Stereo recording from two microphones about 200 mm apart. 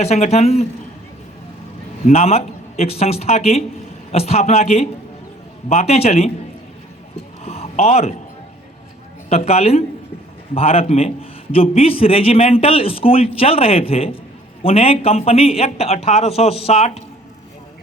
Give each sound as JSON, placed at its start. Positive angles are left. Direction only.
{"t": 0.0, "sound": "a man's voice", "side_deg": 35}
{"t": 2.0, "sound": "a man's voice", "side_deg": 30}
{"t": 7.4, "sound": "a sound", "side_deg": 30}
{"t": 9.3, "sound": "a man's voice", "side_deg": 30}